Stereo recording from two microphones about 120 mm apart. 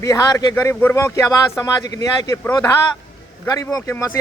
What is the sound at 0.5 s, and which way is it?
Speech, 20° left (ahead or behind).